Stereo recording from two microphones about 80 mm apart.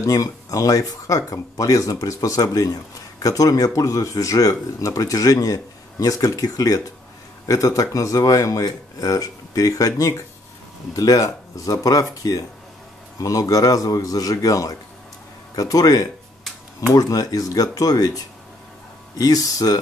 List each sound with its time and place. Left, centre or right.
0.0 s speech: left